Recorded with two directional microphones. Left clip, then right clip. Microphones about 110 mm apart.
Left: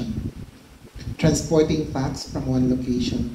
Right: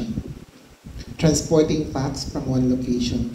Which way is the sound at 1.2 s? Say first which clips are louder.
Right 1 dB; 45° right (ahead or behind).